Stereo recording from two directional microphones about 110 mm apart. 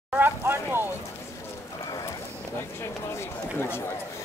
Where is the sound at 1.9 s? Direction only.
35° left (ahead or behind).